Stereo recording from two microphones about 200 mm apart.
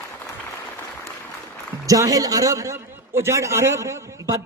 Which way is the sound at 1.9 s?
15° right (ahead or behind).